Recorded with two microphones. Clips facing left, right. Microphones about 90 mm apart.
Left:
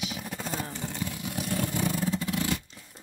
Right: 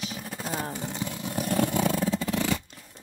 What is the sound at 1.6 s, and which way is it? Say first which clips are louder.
Vehicle: right 6 dB; 65° right (ahead or behind).